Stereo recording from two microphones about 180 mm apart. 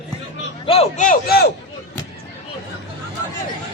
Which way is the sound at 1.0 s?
55° left (ahead or behind).